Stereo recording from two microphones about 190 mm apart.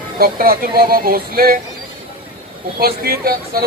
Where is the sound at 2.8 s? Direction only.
50° right (ahead or behind).